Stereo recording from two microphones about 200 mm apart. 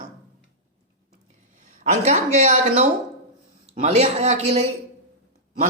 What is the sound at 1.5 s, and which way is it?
Speech, 40° right (ahead or behind).